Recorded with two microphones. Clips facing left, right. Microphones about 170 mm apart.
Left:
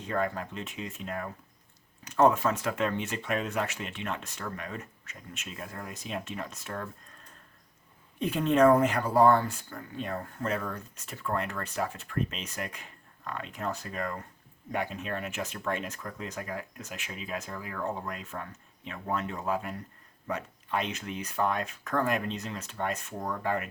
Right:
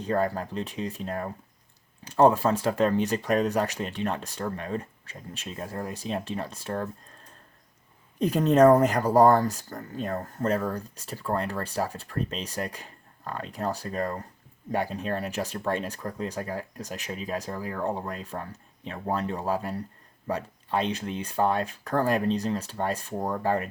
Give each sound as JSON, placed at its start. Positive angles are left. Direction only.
{"t": 0.0, "sound": "speech", "side_deg": -35}
{"t": 8.2, "sound": "speech", "side_deg": -40}